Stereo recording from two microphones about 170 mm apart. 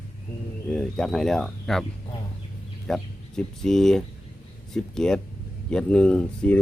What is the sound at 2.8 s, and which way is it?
Speech, 5° left (ahead or behind).